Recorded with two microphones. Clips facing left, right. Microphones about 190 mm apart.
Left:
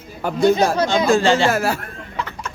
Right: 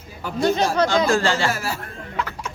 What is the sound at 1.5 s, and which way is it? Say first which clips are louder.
Speech: left 7 dB; 55° left (ahead or behind).